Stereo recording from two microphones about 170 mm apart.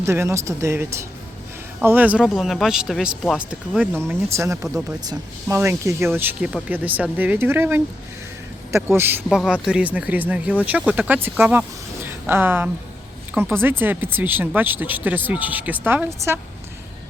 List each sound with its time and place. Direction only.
0.0 s speech: 15° right (ahead or behind)